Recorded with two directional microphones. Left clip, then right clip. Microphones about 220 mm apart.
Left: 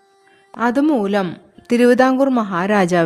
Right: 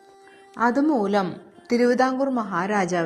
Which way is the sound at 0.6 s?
50° left (ahead or behind).